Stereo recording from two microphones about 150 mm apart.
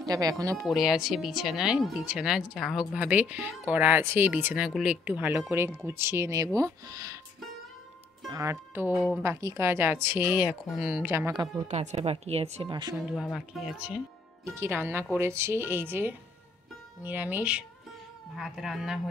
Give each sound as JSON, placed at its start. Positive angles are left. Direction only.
{"t": 0.0, "sound": "speech", "side_deg": -25}
{"t": 0.7, "sound": "speech", "side_deg": 0}
{"t": 8.3, "sound": "speech", "side_deg": -20}
{"t": 11.6, "sound": "a woman's voice", "side_deg": -50}
{"t": 13.1, "sound": "speech", "side_deg": 0}